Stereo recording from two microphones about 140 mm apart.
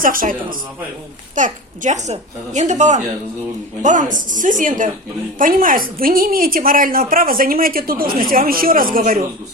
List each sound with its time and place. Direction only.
0.0 s a woman's voice: 80° right
1.4 s a child's voice: 60° right (ahead or behind)
5.4 s a woman's voice: 80° right